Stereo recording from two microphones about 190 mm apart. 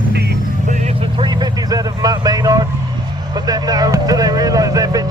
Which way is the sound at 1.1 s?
25° right (ahead or behind).